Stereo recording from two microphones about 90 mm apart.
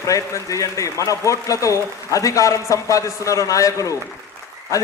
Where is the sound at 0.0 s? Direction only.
40° left (ahead or behind).